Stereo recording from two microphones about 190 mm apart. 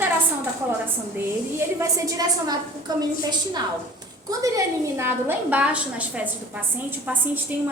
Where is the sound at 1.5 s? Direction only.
15° right (ahead or behind).